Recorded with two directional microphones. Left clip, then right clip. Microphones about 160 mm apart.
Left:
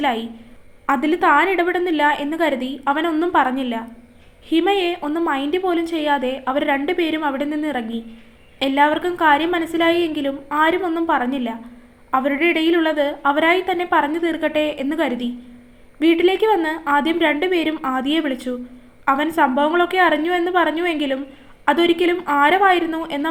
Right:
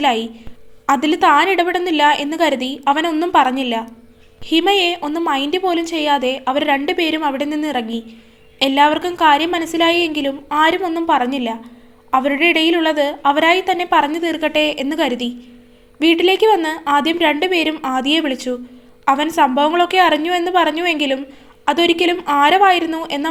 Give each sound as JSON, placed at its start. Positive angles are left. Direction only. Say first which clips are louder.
{"t": 0.9, "sound": "a woman's voice", "louder": "right 3 dB", "side_deg": -40}